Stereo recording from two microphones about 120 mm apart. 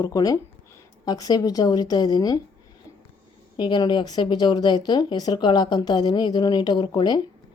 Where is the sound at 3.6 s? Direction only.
40° left (ahead or behind).